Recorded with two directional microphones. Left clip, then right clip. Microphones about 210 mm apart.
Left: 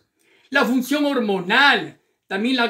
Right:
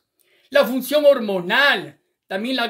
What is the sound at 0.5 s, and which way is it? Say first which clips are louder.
Speech: right 2 dB; 50° right (ahead or behind).